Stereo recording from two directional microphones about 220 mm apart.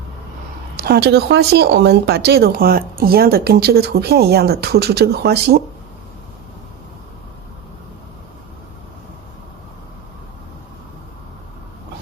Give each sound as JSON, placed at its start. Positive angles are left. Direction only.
{"t": 0.8, "sound": "speech", "side_deg": -45}